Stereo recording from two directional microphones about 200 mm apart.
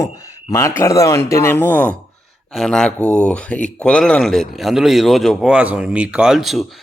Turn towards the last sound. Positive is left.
turn(degrees=0)  # may be behind; listen again after turning